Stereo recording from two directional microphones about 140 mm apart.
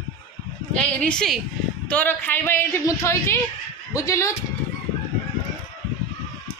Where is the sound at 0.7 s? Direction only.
5° left (ahead or behind).